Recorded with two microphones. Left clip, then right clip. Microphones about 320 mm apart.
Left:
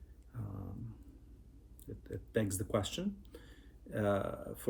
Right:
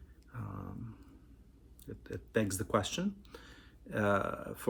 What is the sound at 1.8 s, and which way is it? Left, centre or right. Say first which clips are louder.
Speech: right 2 dB; right.